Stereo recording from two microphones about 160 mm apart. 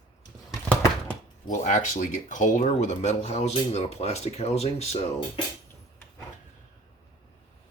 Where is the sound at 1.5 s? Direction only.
55° left (ahead or behind).